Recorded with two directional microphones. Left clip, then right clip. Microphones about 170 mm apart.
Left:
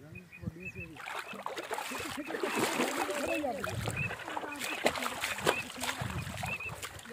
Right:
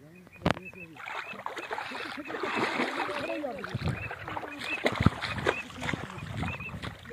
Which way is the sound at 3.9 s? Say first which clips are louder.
Even; 20° right (ahead or behind).